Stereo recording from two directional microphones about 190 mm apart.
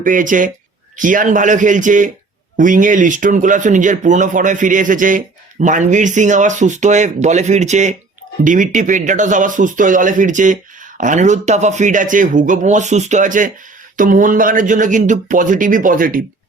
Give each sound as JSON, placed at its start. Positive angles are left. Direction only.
{"t": 0.0, "sound": "speech", "side_deg": -45}